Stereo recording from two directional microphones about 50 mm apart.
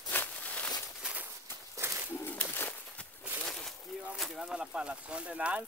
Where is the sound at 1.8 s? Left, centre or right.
Right.